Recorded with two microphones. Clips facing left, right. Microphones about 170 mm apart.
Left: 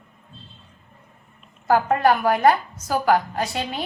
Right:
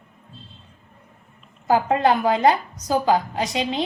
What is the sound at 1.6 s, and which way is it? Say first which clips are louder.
A woman's voice: even; 20° right (ahead or behind).